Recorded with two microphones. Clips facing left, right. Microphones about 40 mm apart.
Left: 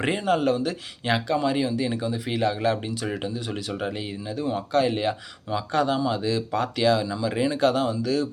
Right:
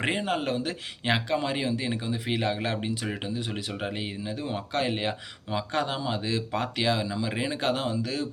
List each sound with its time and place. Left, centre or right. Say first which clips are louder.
0.0 s speech: left 5 dB; right